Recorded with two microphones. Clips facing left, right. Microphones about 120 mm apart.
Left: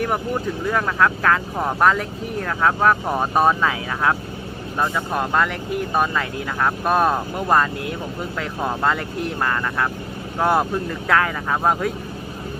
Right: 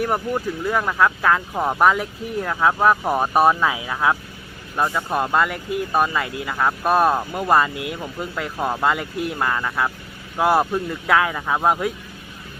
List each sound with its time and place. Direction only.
0.7 s speech: 10° right (ahead or behind)